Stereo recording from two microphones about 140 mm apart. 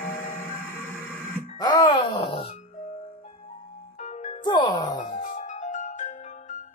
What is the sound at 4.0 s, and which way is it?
Music, 55° left (ahead or behind).